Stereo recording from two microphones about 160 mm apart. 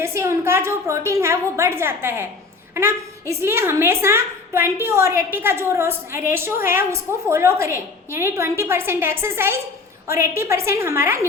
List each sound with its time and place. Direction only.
0.0 s a woman's voice: 15° right (ahead or behind)